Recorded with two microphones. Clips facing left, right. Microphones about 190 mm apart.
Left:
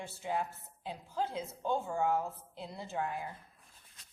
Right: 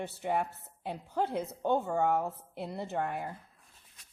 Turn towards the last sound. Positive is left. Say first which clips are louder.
# right 3 dB
turn(degrees=-60)  # may be behind; listen again after turning